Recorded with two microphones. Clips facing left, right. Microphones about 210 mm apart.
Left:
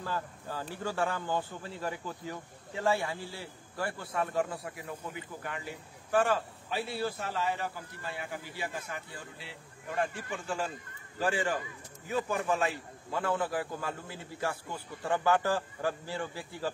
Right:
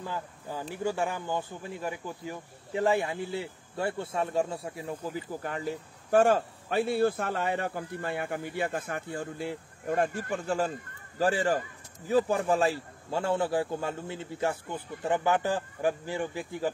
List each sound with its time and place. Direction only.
0.0 s a man's voice: 15° right (ahead or behind)